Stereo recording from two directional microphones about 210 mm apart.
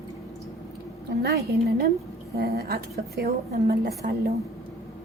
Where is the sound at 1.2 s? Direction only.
50° right (ahead or behind).